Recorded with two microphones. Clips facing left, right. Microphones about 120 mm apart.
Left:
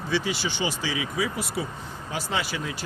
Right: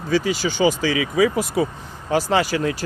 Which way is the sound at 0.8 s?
85° right.